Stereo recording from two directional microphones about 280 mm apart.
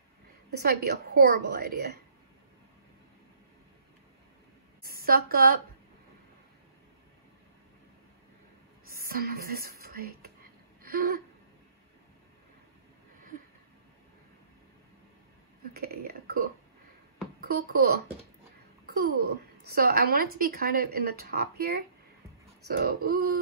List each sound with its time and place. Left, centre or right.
0.5 s a woman's voice: right
4.8 s a woman's voice: right
8.8 s speech: right
10.8 s a sound: right
15.7 s burping: right
17.4 s a child's voice: right
18.9 s a sound: right
19.2 s a woman's voice: right